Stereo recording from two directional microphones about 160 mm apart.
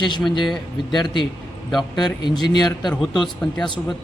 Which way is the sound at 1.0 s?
30° left (ahead or behind).